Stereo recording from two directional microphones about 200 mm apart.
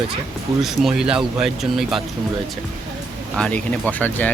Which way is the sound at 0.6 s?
Centre (ahead or behind).